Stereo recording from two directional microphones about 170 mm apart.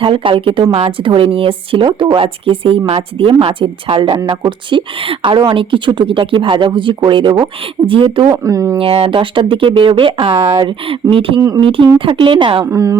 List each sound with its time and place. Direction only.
0.0 s a woman's voice: 30° right (ahead or behind)
8.3 s speech: 20° right (ahead or behind)
8.8 s a woman's voice: 35° right (ahead or behind)
10.3 s speech: 15° right (ahead or behind)
10.6 s a woman's voice: 30° right (ahead or behind)
11.3 s speech: 20° right (ahead or behind)
11.6 s a woman's voice: 30° right (ahead or behind)
12.6 s speech: 20° right (ahead or behind)